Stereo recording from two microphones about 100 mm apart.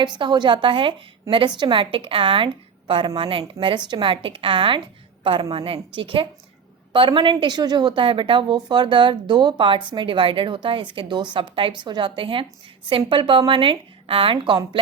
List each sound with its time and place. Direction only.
0.0 s a woman's voice: 50° right (ahead or behind)